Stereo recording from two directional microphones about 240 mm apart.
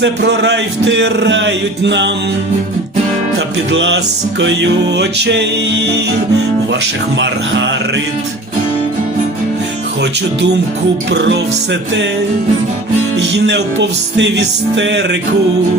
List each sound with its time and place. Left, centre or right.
0.0 s speech: right
3.3 s speech: right
13.1 s speech: right